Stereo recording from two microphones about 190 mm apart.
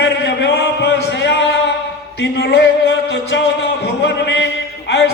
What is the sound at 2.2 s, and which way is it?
Speech, 60° left (ahead or behind).